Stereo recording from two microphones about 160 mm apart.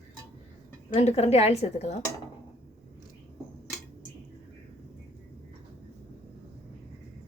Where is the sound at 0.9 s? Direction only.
45° left (ahead or behind).